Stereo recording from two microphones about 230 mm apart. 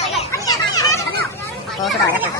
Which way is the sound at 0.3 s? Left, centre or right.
Centre.